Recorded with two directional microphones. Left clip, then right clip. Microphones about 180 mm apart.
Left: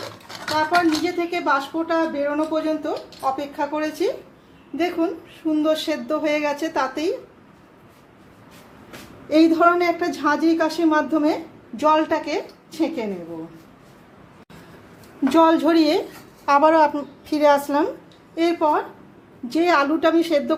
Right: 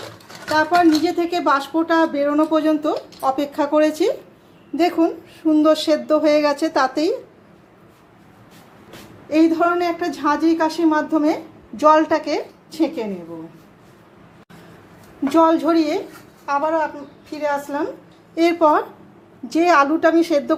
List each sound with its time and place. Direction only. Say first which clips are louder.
0.5 s a woman's voice: right 4 dB; 35° right (ahead or behind)
4.8 s speech: right 5 dB; 25° right (ahead or behind)
9.3 s a woman's voice: left 1 dB; centre (ahead or behind); by 13.1 s 15° right (ahead or behind)
15.3 s speech: right 1 dB; centre (ahead or behind)
16.5 s a woman's voice: left 5 dB; 35° left (ahead or behind)
18.3 s speech: right 4 dB; 25° right (ahead or behind)
19.5 s a woman's voice: right 3 dB; 10° right (ahead or behind)